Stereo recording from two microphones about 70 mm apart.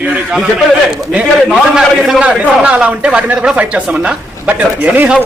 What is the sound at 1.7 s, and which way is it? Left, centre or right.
A man's voice, centre.